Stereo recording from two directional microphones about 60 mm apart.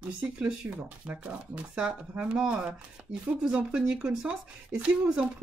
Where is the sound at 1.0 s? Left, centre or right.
Right.